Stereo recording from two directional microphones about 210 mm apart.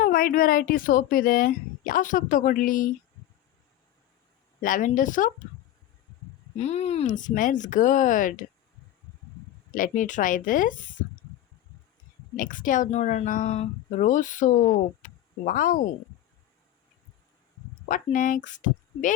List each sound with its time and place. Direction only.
0.0 s speech: 40° left (ahead or behind)
4.6 s speech: 40° left (ahead or behind)
6.6 s speech: 30° left (ahead or behind)
9.7 s speech: 40° left (ahead or behind)
12.4 s speech: 40° left (ahead or behind)
17.8 s speech: 40° left (ahead or behind)